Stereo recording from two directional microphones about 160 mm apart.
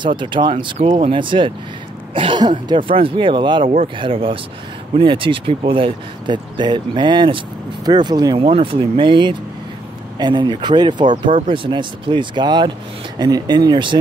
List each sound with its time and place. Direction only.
0.0 s speech: 30° right (ahead or behind)